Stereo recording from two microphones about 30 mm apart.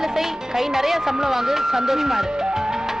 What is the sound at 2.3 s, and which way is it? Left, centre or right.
Music, right.